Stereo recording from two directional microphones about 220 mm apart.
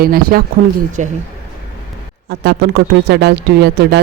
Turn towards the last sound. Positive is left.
turn(degrees=-50)  # may be behind; listen again after turning